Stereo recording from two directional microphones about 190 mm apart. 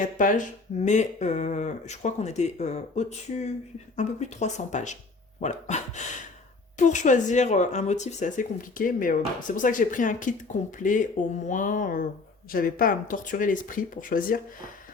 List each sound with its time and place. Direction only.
0.0 s speech: 45° left (ahead or behind)